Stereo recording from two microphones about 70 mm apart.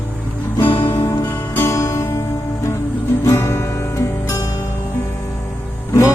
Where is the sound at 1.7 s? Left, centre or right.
Left.